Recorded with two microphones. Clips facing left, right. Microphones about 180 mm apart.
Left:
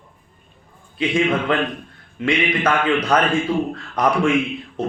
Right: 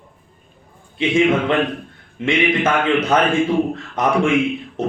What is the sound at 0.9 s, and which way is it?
Speech, 25° right (ahead or behind).